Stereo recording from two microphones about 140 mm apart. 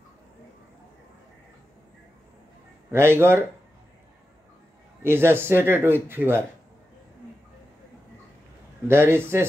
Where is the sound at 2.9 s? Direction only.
15° right (ahead or behind).